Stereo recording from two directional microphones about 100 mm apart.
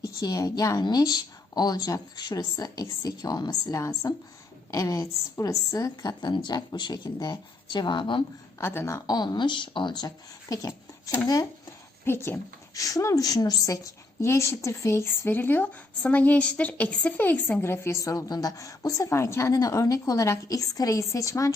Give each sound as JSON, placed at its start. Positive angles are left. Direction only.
{"t": 0.0, "sound": "a woman's voice", "side_deg": 40}
{"t": 8.5, "sound": "a woman's voice", "side_deg": 25}
{"t": 9.0, "sound": "a woman's voice", "side_deg": 45}
{"t": 10.5, "sound": "speech", "side_deg": 35}
{"t": 12.0, "sound": "a woman's voice", "side_deg": 25}